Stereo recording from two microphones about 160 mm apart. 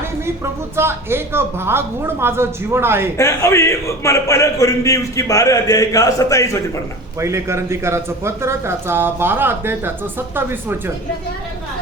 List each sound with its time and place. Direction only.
0.8 s speech: 15° right (ahead or behind)
3.2 s a man's voice: 15° left (ahead or behind)
7.2 s speech: 20° right (ahead or behind)